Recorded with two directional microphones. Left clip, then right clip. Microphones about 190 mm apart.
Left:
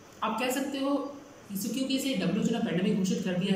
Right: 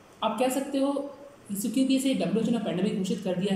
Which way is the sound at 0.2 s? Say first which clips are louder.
Right 3 dB; 20° right (ahead or behind).